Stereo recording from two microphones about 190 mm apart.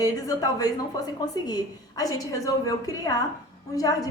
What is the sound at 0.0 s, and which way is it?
A woman's voice, 20° left (ahead or behind).